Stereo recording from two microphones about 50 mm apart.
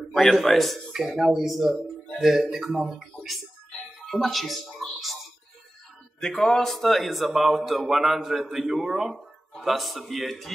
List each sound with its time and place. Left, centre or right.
0.1 s a man's voice: centre
4.0 s music: centre
6.2 s a man's voice: centre